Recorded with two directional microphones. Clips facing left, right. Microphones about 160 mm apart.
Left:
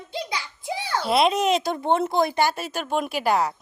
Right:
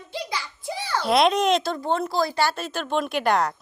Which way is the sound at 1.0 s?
5° left (ahead or behind).